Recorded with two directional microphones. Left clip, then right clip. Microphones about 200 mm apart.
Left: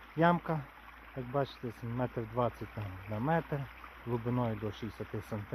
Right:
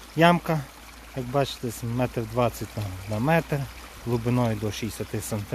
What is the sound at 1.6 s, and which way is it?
Speech, 15° right (ahead or behind).